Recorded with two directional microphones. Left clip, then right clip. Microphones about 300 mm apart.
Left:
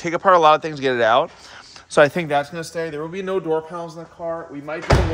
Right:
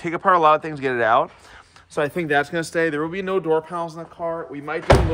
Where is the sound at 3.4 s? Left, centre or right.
Centre.